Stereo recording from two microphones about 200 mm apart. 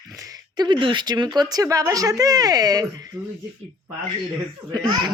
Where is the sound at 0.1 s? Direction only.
15° right (ahead or behind).